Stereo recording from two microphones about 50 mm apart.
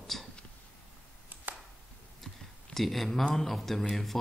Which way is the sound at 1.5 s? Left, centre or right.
Right.